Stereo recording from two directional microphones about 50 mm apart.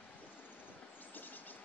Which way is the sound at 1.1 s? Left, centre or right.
Left.